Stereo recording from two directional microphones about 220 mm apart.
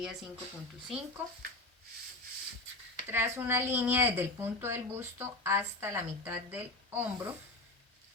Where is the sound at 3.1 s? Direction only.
10° right (ahead or behind).